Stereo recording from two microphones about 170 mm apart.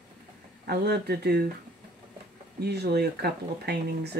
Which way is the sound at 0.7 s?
70° right (ahead or behind).